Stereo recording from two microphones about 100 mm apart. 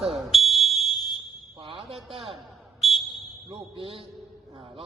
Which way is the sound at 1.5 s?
60° right (ahead or behind).